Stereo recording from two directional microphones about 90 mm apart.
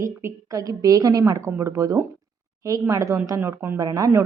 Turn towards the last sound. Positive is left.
turn(degrees=-40)  # may be behind; listen again after turning